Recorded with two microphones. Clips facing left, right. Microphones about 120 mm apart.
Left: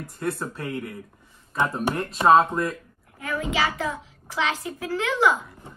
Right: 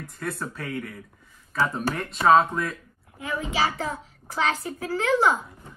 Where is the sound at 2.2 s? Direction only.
Centre (ahead or behind).